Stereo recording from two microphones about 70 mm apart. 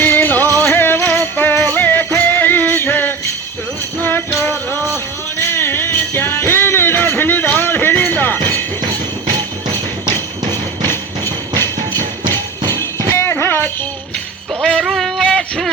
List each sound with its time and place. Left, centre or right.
0.0 s music: left
7.6 s jingle bell: left
11.5 s music: right
12.7 s music: left
14.6 s music: centre
14.8 s a sound: centre